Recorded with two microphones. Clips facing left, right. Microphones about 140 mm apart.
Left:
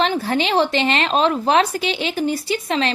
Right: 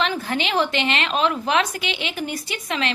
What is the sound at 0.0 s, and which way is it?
A woman's voice, 35° left (ahead or behind).